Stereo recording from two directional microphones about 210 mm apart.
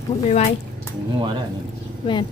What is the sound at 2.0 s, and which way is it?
Speech, 20° left (ahead or behind).